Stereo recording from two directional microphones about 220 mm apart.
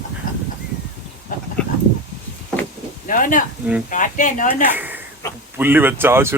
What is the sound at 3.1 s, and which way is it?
Speech, 35° left (ahead or behind).